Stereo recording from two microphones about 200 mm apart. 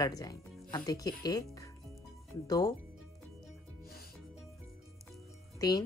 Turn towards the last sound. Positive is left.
turn(degrees=20)  # may be behind; listen again after turning